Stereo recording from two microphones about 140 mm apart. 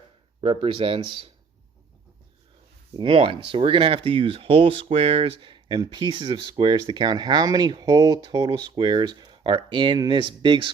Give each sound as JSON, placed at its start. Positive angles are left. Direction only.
{"t": 0.4, "sound": "speech", "side_deg": -40}
{"t": 2.9, "sound": "speech", "side_deg": -35}